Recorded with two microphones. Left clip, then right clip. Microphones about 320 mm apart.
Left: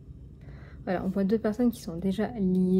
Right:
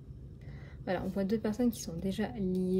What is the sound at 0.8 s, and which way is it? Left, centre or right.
A woman's voice, centre.